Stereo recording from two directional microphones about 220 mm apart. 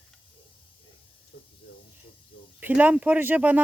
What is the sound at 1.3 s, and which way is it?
Hiss, 55° left (ahead or behind).